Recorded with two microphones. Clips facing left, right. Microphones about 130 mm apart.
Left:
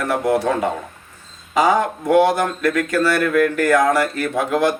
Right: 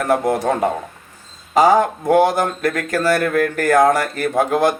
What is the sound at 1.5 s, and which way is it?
Speech, 35° right (ahead or behind).